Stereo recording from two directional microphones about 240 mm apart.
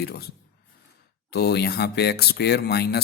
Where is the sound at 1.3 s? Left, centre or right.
Left.